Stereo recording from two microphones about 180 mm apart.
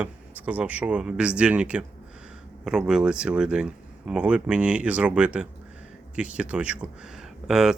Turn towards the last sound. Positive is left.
turn(degrees=-5)  # may be behind; listen again after turning